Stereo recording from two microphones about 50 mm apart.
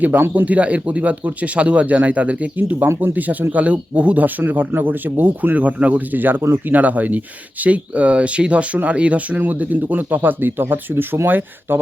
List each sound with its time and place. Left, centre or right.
0.2 s speech: right